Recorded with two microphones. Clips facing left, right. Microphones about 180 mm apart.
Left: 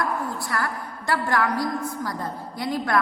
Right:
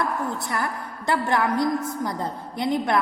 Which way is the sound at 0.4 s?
20° right (ahead or behind).